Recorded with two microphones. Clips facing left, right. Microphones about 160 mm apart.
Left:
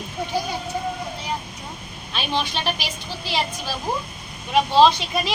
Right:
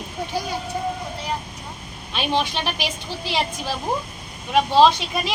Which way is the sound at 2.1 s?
15° right (ahead or behind).